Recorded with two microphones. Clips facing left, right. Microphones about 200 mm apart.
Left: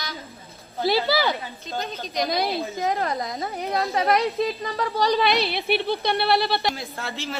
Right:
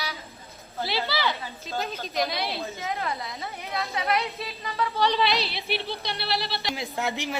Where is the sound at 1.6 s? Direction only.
Centre (ahead or behind).